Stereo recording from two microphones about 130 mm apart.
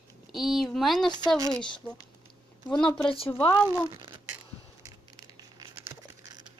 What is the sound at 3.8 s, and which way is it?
Speech, 35° right (ahead or behind).